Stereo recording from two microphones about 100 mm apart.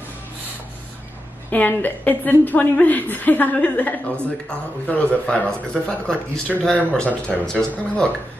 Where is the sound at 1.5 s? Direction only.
20° left (ahead or behind).